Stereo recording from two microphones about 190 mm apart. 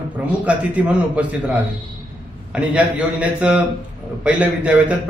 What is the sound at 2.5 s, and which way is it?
A man's voice, 5° right (ahead or behind).